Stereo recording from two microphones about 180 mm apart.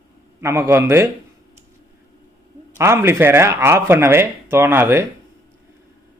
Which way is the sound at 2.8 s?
15° right (ahead or behind).